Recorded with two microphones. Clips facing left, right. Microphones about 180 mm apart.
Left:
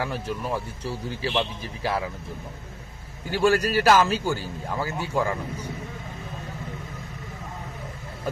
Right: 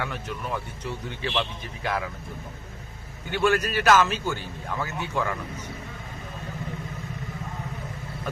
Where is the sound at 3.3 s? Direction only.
35° left (ahead or behind).